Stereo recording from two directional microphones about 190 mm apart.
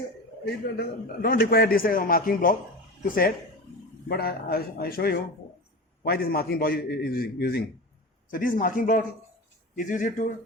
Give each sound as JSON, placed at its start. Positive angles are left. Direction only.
{"t": 0.4, "sound": "a man's voice", "side_deg": 55}